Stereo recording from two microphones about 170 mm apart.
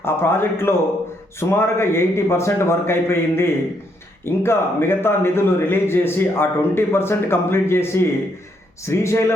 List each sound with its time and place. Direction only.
0.0 s a man's voice: 15° left (ahead or behind)
8.9 s a man's voice: 15° left (ahead or behind)